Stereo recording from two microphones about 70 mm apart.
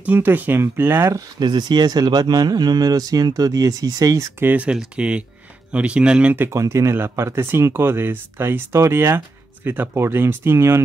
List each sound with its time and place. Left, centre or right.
0.0 s speech: right
1.4 s speech: right
4.6 s speech: centre
6.5 s speech: right